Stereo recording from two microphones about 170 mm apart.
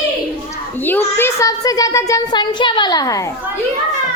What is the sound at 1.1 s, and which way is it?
Speech, 15° left (ahead or behind).